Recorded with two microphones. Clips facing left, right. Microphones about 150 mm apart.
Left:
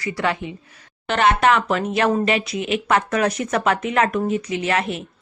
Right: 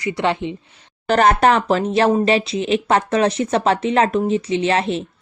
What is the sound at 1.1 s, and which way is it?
Speech, 40° right (ahead or behind).